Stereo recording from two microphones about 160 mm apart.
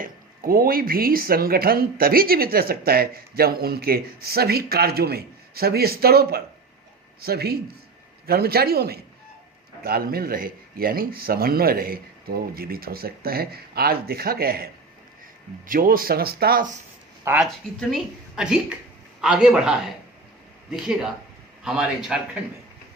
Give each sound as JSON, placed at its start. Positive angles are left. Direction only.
{"t": 0.0, "sound": "speech", "side_deg": -65}
{"t": 17.2, "sound": "a woman's voice", "side_deg": -10}